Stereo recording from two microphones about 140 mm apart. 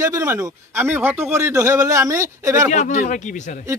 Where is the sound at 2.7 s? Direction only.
60° left (ahead or behind).